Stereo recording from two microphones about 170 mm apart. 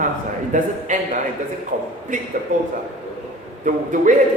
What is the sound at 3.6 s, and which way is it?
Speech, 50° right (ahead or behind).